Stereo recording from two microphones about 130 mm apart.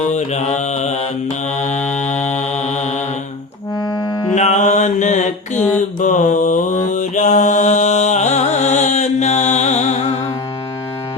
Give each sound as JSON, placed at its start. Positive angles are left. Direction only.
{"t": 0.1, "sound": "mantra", "side_deg": 65}
{"t": 3.8, "sound": "music", "side_deg": 35}
{"t": 4.4, "sound": "mantra", "side_deg": 65}